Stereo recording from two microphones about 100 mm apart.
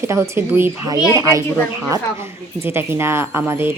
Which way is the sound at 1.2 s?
35° right (ahead or behind).